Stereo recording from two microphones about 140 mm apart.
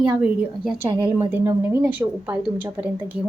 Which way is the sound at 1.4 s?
20° right (ahead or behind).